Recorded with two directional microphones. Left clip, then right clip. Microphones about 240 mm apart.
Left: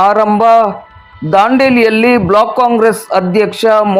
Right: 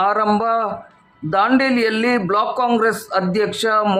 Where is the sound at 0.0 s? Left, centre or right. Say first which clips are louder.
Left 9 dB; centre.